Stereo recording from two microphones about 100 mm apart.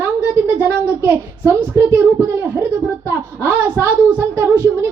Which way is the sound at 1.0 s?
25° right (ahead or behind).